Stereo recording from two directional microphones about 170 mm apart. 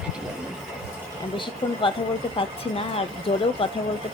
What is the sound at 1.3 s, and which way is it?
Speech, 30° left (ahead or behind).